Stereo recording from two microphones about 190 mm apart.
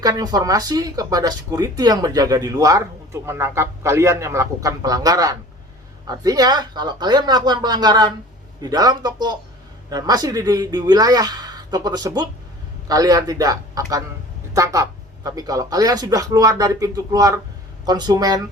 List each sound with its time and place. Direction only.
0.0 s speech: 20° right (ahead or behind)